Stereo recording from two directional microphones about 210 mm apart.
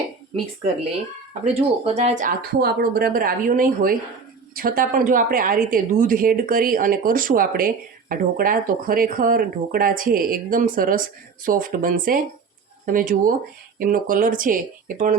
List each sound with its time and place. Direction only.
1.5 s a woman's voice: 30° right (ahead or behind)